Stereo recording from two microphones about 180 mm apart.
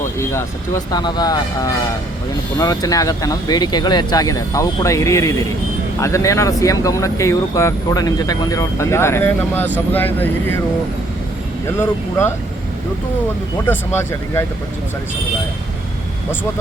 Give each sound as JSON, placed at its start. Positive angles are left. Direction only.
{"t": 0.0, "sound": "speech", "side_deg": 15}
{"t": 11.8, "sound": "speech", "side_deg": 15}
{"t": 13.7, "sound": "speech", "side_deg": 15}